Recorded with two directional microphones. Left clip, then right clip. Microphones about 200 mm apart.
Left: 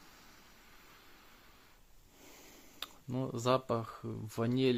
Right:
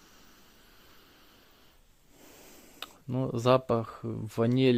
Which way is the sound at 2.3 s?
20° right (ahead or behind).